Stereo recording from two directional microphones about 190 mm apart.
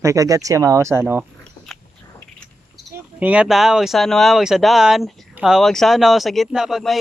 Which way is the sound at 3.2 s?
5° right (ahead or behind).